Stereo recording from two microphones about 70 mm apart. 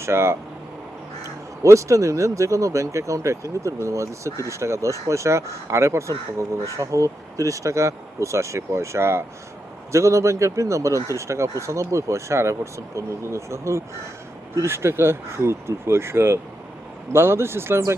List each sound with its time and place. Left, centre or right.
0.0 s speech: right
1.6 s speech: right